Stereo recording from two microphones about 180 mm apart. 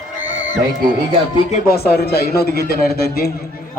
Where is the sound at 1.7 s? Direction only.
60° left (ahead or behind).